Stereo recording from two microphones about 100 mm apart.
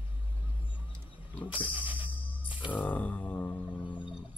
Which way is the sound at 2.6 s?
15° left (ahead or behind).